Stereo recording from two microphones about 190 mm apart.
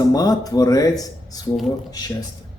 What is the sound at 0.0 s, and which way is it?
Speech, 20° left (ahead or behind).